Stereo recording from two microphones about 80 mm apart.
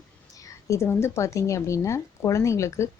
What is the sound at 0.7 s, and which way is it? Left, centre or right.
Speech, left.